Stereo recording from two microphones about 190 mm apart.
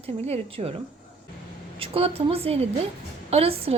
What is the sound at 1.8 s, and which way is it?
A woman's voice, 30° right (ahead or behind).